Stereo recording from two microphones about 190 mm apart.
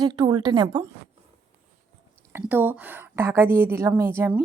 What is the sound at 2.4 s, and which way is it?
A woman's voice, 10° right (ahead or behind).